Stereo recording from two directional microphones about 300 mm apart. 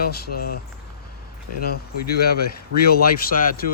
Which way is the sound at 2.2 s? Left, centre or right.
Left.